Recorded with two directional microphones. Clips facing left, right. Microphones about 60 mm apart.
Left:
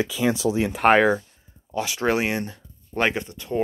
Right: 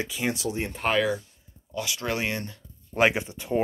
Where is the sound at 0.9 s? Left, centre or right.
Left.